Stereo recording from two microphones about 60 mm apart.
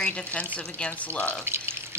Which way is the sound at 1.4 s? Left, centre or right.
Right.